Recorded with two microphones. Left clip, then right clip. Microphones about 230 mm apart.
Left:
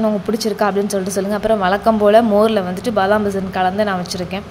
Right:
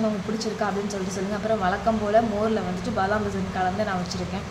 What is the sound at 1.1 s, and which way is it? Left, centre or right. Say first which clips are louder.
A woman's voice: left 9 dB; left.